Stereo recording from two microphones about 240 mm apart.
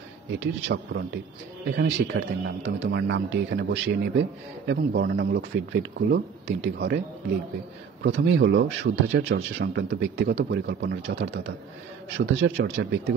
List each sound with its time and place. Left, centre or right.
0.3 s speech: right
8.0 s speech: right